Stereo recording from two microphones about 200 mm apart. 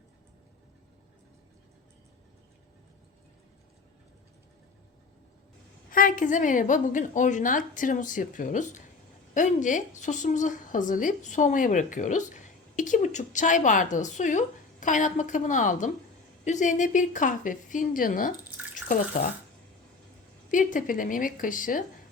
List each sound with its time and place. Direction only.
5.9 s speech: 45° left (ahead or behind)
20.5 s speech: 40° left (ahead or behind)